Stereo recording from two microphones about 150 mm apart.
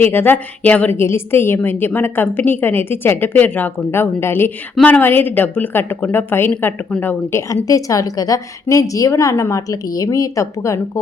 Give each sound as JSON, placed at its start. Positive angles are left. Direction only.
{"t": 0.0, "sound": "a woman's voice", "side_deg": 15}